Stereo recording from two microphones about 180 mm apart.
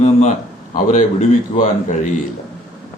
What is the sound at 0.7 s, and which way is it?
Speech, 50° left (ahead or behind).